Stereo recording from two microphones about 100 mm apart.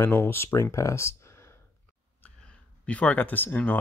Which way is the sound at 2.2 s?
15° left (ahead or behind).